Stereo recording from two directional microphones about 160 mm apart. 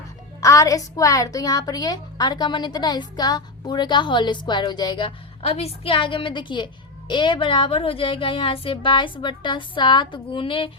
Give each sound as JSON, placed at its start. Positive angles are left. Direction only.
{"t": 0.4, "sound": "a woman's voice", "side_deg": 20}